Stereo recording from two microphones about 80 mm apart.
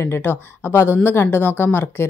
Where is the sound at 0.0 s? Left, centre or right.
Left.